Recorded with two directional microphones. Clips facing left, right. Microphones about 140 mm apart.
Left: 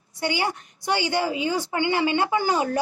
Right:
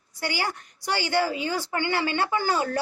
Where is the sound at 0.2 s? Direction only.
20° left (ahead or behind).